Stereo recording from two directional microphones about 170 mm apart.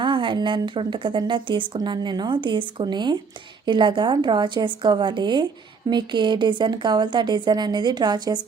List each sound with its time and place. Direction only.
0.0 s speech: 30° right (ahead or behind)